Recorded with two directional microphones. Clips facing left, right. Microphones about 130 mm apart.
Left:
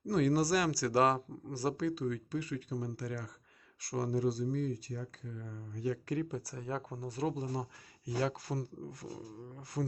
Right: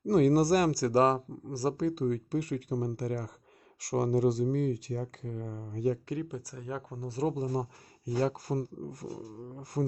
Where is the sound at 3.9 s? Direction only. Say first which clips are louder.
Right 6 dB; 75° right (ahead or behind); by 5.7 s 45° right (ahead or behind).